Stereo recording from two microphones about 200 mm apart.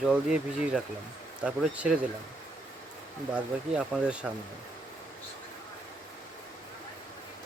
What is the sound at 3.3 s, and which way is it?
Speech, 5° right (ahead or behind).